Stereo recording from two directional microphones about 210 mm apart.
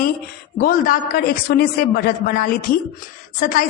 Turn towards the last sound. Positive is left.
turn(degrees=40)  # may be behind; listen again after turning